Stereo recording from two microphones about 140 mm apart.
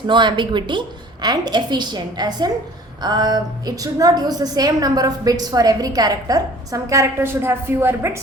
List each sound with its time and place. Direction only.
0.1 s a woman's voice: 35° right (ahead or behind); by 8.2 s 20° right (ahead or behind)